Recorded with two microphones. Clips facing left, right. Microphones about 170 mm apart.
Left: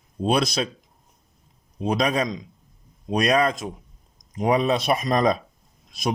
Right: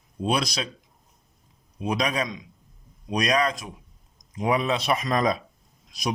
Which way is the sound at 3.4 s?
45° left (ahead or behind).